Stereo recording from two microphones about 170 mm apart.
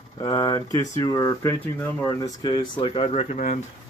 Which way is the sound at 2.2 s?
25° left (ahead or behind).